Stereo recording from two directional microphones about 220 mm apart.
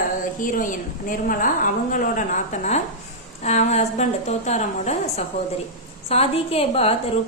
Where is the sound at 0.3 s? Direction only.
35° left (ahead or behind).